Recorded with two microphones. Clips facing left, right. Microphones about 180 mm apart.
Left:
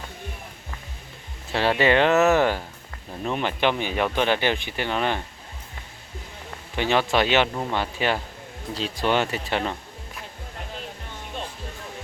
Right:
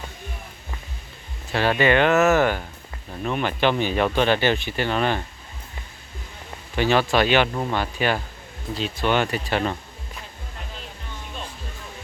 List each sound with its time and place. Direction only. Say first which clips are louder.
1.8 s speech: right 1 dB; 25° left (ahead or behind)
6.7 s speech: right 2 dB; 20° left (ahead or behind)
7.5 s speech: right 2 dB; centre (ahead or behind)
7.8 s speech: even; 25° left (ahead or behind)